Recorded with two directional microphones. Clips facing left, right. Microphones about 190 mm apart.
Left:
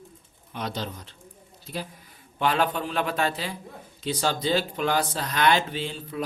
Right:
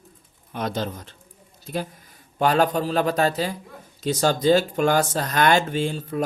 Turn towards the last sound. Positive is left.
turn(degrees=-45)  # may be behind; listen again after turning